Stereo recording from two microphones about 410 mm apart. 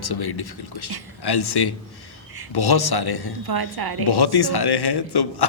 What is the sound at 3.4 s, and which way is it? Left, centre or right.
Speech, right.